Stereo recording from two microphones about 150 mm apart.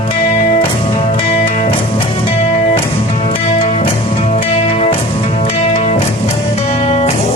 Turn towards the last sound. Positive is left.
turn(degrees=45)  # may be behind; listen again after turning